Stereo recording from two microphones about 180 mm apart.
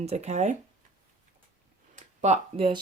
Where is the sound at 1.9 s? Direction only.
40° right (ahead or behind).